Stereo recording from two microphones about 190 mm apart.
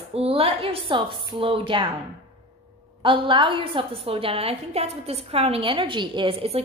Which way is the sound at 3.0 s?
25° right (ahead or behind).